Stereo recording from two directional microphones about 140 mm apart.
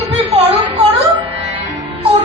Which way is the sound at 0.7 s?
40° right (ahead or behind).